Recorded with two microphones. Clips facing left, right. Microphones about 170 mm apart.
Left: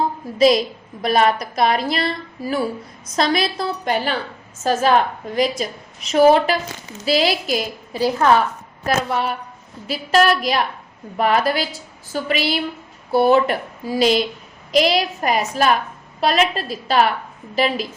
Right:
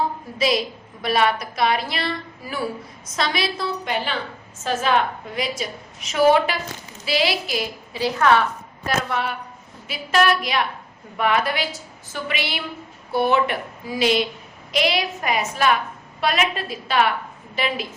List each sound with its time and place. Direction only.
0.3 s a woman's voice: 40° left (ahead or behind)